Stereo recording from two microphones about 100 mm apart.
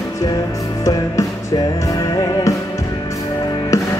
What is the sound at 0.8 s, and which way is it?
Music, 40° left (ahead or behind).